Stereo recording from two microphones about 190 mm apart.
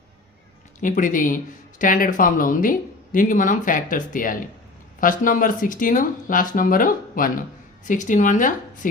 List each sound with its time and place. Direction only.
0.8 s speech: 45° left (ahead or behind)